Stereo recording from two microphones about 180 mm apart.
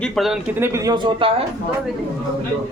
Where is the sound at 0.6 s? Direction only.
15° right (ahead or behind).